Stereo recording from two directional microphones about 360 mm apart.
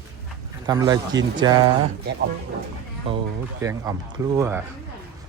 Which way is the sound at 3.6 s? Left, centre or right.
Centre.